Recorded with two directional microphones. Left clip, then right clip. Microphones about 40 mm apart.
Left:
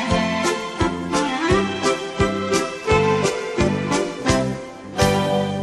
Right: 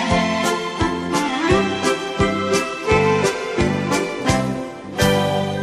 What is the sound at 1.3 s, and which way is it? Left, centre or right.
Music, centre.